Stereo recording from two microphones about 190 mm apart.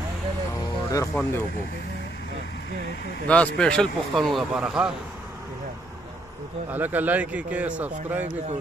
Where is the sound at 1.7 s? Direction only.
60° left (ahead or behind).